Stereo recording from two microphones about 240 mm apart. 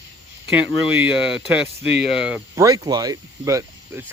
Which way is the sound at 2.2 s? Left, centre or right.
Centre.